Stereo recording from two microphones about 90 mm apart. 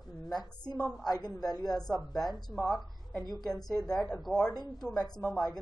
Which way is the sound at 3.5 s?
45° left (ahead or behind).